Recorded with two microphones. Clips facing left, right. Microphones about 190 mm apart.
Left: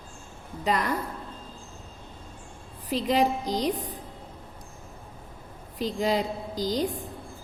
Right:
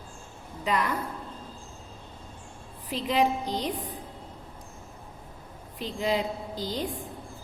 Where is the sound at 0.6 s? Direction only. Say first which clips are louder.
Left 1 dB; 40° left (ahead or behind).